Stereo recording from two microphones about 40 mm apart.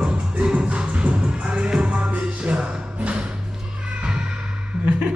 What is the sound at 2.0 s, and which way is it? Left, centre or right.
Music, right.